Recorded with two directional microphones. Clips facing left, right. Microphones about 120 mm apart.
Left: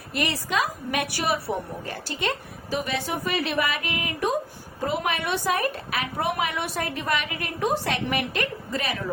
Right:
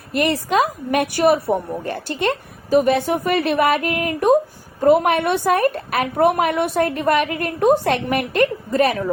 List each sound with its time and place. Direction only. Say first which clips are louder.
0.1 s a woman's voice: right 8 dB; 50° right (ahead or behind)